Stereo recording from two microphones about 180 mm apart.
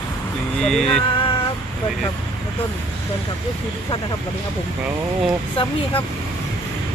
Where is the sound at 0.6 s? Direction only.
5° left (ahead or behind).